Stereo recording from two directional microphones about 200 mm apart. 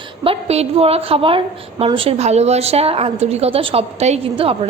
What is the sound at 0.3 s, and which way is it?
A woman's voice, 30° right (ahead or behind).